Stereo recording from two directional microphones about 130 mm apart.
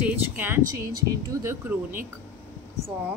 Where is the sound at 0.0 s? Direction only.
15° right (ahead or behind).